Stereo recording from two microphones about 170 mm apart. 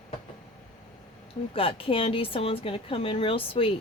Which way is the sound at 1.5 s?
30° left (ahead or behind).